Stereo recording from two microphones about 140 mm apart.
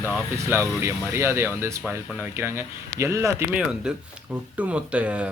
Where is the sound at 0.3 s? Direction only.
20° right (ahead or behind).